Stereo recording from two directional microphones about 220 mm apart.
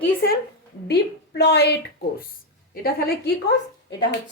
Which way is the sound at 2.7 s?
45° left (ahead or behind).